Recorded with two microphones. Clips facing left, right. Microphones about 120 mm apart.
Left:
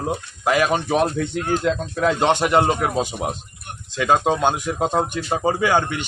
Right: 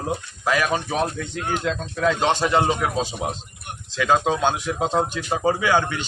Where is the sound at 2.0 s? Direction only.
55° left (ahead or behind).